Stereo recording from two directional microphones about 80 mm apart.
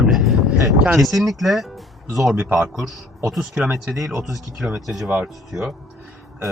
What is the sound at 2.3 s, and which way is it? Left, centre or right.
Speech, centre.